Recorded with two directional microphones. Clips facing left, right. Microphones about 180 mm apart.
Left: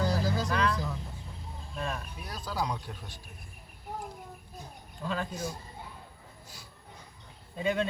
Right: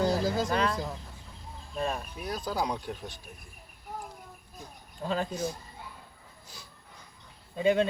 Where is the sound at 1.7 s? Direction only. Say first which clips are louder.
Right 4 dB; 40° right (ahead or behind).